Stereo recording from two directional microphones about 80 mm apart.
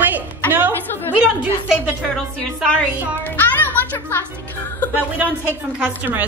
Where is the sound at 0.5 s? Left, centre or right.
Right.